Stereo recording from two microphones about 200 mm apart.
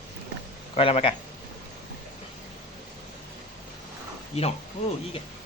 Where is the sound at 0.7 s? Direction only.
30° left (ahead or behind).